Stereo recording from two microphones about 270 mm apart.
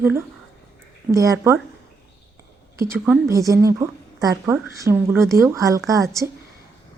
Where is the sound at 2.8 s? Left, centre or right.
Centre.